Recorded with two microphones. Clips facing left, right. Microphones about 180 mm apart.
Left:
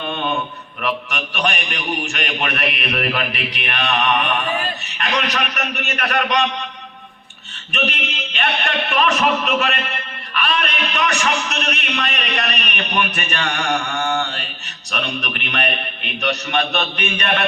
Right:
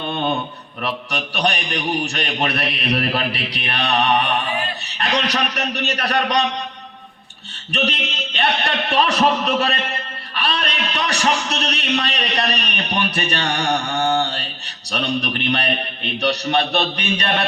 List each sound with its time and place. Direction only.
0.0 s a sound: 40° right (ahead or behind)
0.8 s a man's voice: 35° right (ahead or behind)
7.7 s a man's voice: 35° right (ahead or behind)